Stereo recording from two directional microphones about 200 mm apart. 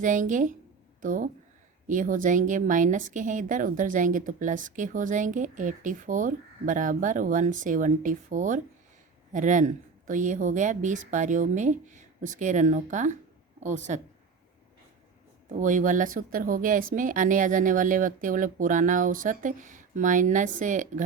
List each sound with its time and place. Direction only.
0.0 s a woman's voice: 40° right (ahead or behind)
15.4 s a woman's voice: 40° right (ahead or behind)